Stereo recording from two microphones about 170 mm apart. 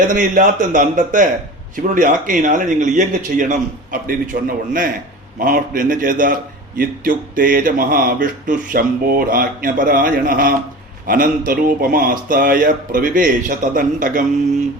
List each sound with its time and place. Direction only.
0.1 s a man's voice: 50° right (ahead or behind)